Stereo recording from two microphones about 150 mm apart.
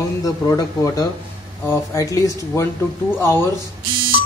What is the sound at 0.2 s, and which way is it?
Speech, 25° left (ahead or behind).